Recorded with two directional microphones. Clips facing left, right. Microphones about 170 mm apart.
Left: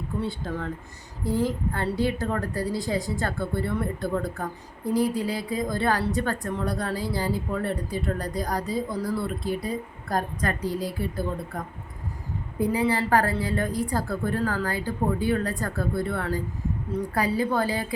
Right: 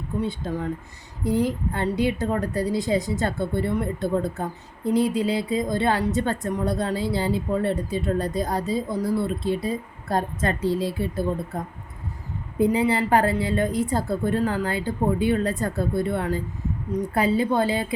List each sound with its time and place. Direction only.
0.2 s a woman's voice: 15° right (ahead or behind)